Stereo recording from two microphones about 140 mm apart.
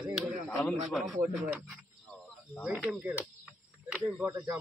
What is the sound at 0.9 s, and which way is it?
Speech, centre (ahead or behind).